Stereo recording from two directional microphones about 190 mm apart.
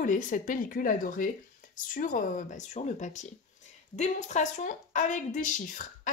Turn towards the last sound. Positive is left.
turn(degrees=45)  # may be behind; listen again after turning